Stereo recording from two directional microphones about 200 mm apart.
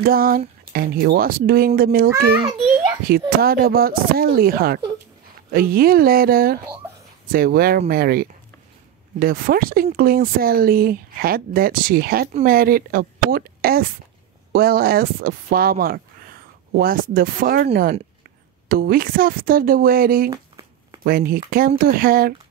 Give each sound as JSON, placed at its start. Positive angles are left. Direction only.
{"t": 0.0, "sound": "speech", "side_deg": -45}
{"t": 3.1, "sound": "speech", "side_deg": -50}
{"t": 18.7, "sound": "speech", "side_deg": -45}
{"t": 20.2, "sound": "a sound", "side_deg": -20}
{"t": 21.0, "sound": "speech", "side_deg": -45}